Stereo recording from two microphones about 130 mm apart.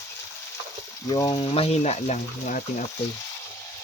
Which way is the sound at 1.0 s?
25° left (ahead or behind).